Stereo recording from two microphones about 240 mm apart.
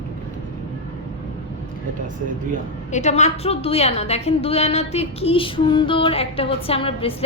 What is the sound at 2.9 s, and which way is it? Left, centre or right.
A woman's voice, left.